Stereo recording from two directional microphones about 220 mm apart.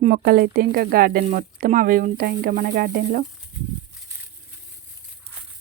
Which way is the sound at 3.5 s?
10° right (ahead or behind).